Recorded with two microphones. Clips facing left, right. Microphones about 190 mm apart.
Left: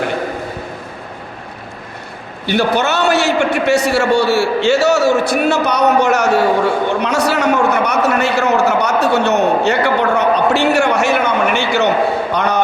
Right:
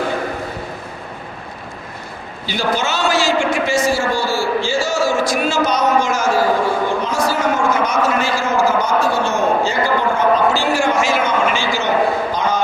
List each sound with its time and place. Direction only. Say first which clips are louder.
2.5 s a man's voice: left 5 dB; 60° left (ahead or behind)